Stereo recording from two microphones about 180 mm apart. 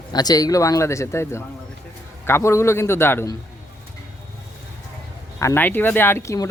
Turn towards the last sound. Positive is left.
turn(degrees=15)  # may be behind; listen again after turning